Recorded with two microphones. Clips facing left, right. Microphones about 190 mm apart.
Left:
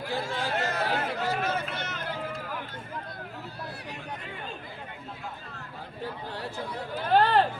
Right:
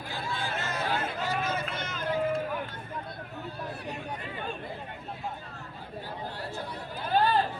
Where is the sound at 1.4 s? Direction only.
65° left (ahead or behind).